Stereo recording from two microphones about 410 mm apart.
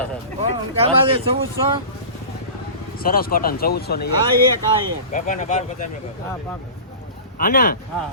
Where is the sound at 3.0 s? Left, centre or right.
Left.